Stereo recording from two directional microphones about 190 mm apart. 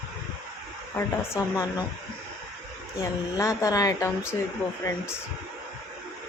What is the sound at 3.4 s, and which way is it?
Speech, 15° left (ahead or behind).